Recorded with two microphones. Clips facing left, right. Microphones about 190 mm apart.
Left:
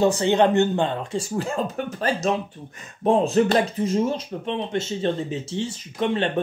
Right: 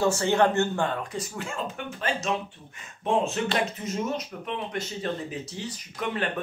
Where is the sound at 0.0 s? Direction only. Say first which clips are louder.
Left 4 dB; 20° left (ahead or behind).